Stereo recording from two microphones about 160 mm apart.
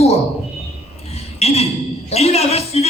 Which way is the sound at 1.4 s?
40° left (ahead or behind).